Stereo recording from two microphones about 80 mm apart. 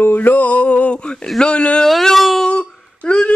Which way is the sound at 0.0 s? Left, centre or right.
Left.